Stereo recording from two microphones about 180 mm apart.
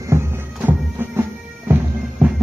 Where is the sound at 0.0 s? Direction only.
15° right (ahead or behind).